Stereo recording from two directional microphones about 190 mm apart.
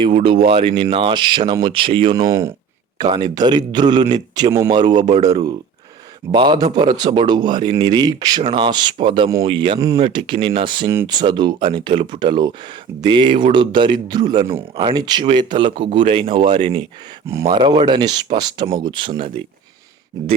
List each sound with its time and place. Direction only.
0.0 s speech: 30° right (ahead or behind)
2.1 s speech: 20° right (ahead or behind)